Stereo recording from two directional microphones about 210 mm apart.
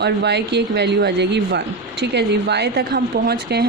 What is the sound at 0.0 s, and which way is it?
Speech, 55° right (ahead or behind).